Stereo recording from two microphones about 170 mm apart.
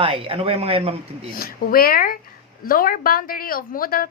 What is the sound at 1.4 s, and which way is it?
A woman's voice, 60° left (ahead or behind).